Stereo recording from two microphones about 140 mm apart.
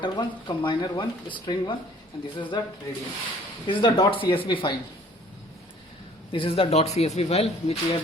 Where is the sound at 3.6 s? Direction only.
35° left (ahead or behind).